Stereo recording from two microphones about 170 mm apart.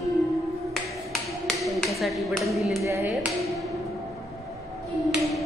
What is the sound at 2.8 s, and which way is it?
Speech, 15° right (ahead or behind).